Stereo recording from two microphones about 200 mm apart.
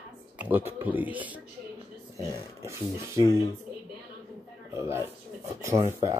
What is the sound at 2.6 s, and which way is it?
Speech, 15° right (ahead or behind).